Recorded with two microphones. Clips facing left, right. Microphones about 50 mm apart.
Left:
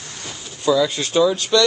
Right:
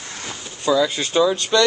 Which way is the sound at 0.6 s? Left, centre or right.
Centre.